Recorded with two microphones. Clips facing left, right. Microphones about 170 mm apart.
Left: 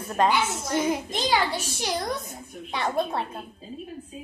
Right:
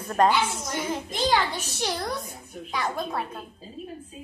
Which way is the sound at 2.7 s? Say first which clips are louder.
Left 3 dB; 25° left (ahead or behind).